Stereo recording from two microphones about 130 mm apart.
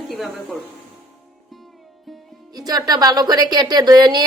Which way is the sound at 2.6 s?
30° right (ahead or behind).